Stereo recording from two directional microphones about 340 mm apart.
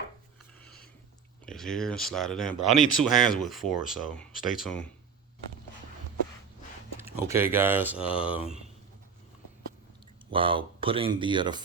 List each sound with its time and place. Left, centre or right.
1.5 s speech: centre
2.5 s speech: left
3.0 s speech: centre
7.3 s speech: centre
10.3 s speech: centre